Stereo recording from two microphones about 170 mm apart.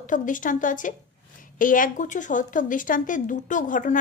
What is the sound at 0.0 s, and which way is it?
A woman's voice, 50° left (ahead or behind).